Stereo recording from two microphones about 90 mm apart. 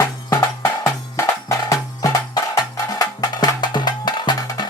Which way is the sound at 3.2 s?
55° left (ahead or behind).